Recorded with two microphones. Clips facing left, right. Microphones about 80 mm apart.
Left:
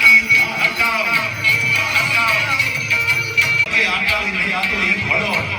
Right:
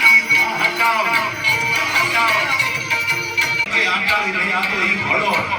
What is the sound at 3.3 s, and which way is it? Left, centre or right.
Music, right.